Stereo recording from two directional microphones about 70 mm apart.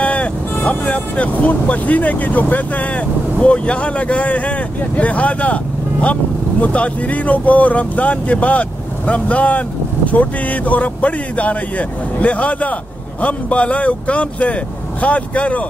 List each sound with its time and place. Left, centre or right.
0.0 s vehicle: centre
0.7 s speech: centre